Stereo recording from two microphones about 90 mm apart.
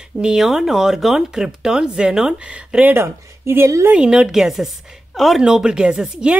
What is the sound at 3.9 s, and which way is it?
A woman's voice, 10° right (ahead or behind).